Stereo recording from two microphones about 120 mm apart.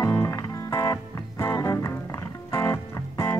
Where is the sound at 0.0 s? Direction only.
25° left (ahead or behind).